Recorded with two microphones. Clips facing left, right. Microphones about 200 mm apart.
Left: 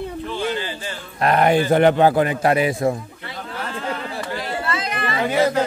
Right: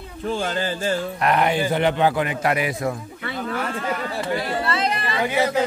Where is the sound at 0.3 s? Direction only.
45° right (ahead or behind).